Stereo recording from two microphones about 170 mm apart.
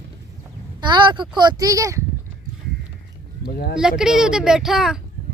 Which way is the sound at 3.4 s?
60° left (ahead or behind).